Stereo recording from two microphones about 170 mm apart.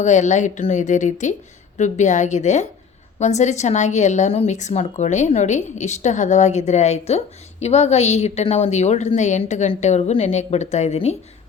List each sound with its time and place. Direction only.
0.0 s a woman's voice: 45° left (ahead or behind)